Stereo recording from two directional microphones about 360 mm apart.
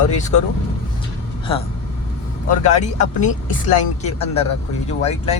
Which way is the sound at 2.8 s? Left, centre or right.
Centre.